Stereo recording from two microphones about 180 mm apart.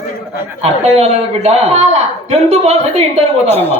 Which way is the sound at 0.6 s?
35° right (ahead or behind).